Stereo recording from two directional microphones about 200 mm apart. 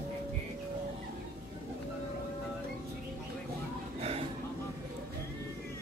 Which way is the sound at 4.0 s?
30° right (ahead or behind).